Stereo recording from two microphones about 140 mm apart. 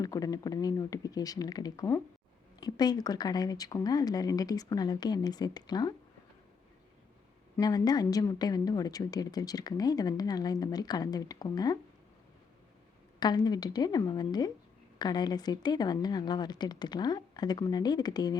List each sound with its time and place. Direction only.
0.0 s a woman's voice: 25° left (ahead or behind)
7.6 s a woman's voice: 25° left (ahead or behind)
13.1 s a woman's voice: 30° left (ahead or behind)